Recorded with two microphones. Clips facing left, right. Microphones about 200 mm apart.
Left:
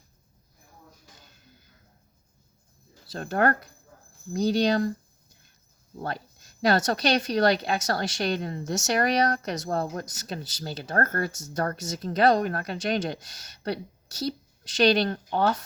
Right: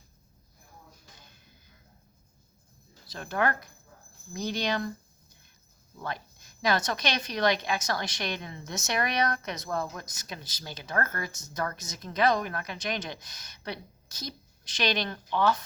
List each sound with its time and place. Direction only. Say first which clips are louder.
3.2 s speech: left 5 dB; 40° left (ahead or behind)
6.0 s speech: left 4 dB; 35° left (ahead or behind)
14.8 s speech: left 7 dB; 40° left (ahead or behind)